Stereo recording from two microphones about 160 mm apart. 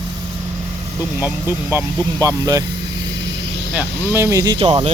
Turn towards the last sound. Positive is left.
turn(degrees=-30)  # may be behind; listen again after turning